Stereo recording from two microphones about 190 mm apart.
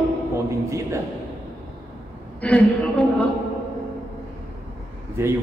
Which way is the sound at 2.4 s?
5° left (ahead or behind).